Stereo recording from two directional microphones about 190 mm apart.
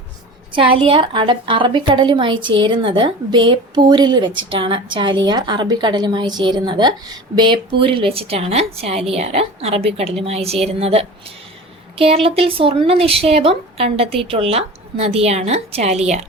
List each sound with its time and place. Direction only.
0.5 s a woman's voice: 25° right (ahead or behind)